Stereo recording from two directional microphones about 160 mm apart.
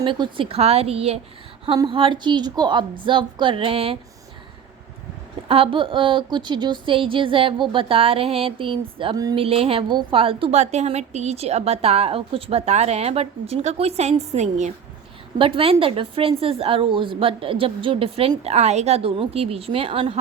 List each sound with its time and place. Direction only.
0.0 s a woman's voice: 30° right (ahead or behind)
5.5 s a woman's voice: 35° right (ahead or behind)
15.4 s a woman's voice: 35° right (ahead or behind)